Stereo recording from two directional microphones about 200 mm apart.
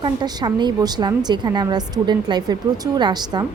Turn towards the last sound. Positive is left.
turn(degrees=-20)  # may be behind; listen again after turning